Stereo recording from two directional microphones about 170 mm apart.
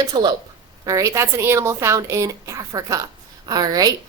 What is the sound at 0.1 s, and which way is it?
A woman's voice, 25° right (ahead or behind).